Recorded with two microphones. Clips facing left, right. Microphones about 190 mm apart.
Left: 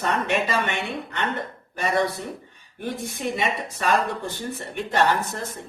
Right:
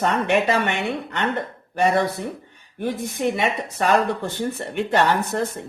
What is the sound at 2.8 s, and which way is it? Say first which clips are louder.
Speech: right 5 dB; 60° right (ahead or behind).